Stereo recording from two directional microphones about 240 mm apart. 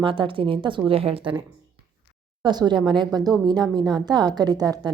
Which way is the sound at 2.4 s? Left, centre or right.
Centre.